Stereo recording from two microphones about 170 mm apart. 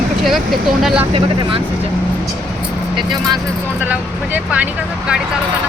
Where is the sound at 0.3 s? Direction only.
Centre (ahead or behind).